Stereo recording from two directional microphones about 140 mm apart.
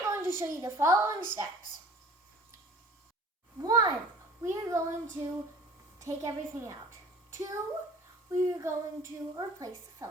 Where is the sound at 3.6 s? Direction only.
25° right (ahead or behind).